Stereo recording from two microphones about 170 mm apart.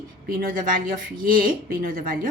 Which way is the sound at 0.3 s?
55° right (ahead or behind).